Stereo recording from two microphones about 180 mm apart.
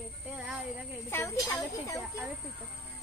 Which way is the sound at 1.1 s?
15° left (ahead or behind).